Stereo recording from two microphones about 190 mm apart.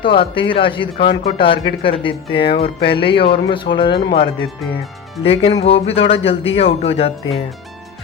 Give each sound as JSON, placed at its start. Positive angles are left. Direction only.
{"t": 0.0, "sound": "speech", "side_deg": 25}